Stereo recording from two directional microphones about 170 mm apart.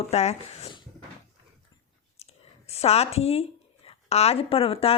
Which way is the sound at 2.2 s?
35° left (ahead or behind).